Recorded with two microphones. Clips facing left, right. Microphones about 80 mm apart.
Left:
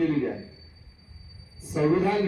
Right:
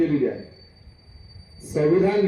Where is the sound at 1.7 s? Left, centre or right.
Centre.